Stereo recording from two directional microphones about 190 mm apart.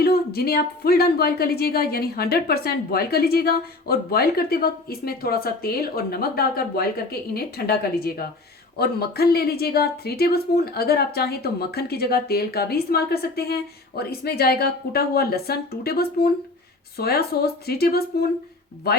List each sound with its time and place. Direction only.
0.0 s a woman's voice: 55° left (ahead or behind)